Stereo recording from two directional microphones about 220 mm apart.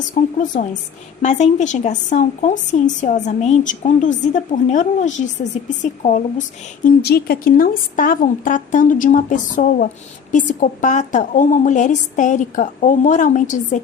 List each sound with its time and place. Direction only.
0.1 s speech: 35° left (ahead or behind)
6.8 s speech: 45° left (ahead or behind)